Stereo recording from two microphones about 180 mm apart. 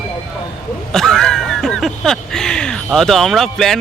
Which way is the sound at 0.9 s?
Centre (ahead or behind).